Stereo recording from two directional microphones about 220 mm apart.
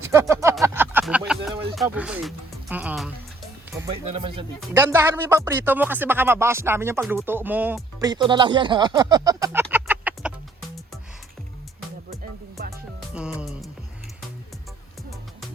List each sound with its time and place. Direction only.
0.0 s a sound: 10° right (ahead or behind)
1.7 s speech: centre (ahead or behind)
4.0 s speech: 25° right (ahead or behind)
4.8 s speech: 10° right (ahead or behind)
13.1 s speech: centre (ahead or behind)